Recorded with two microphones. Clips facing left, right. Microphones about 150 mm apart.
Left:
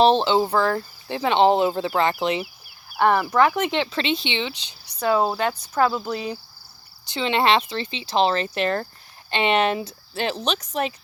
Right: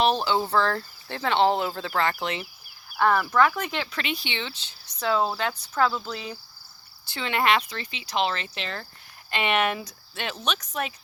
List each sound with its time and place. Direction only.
0.0 s speech: 25° left (ahead or behind); by 5.9 s 10° left (ahead or behind)
6.1 s cricket: 60° left (ahead or behind)
7.0 s speech: 20° left (ahead or behind)
8.5 s speech: 50° left (ahead or behind)
9.3 s speech: 30° left (ahead or behind)